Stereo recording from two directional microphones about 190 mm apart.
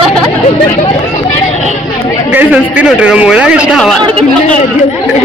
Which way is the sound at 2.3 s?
10° right (ahead or behind).